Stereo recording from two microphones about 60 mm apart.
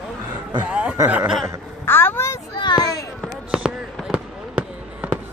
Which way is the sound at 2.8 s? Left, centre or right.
Left.